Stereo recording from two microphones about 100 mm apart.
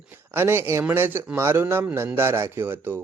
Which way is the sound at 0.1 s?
20° right (ahead or behind).